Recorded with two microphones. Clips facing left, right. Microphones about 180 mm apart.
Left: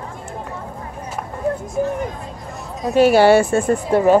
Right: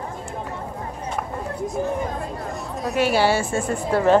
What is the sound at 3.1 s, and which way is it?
Speech, 55° left (ahead or behind).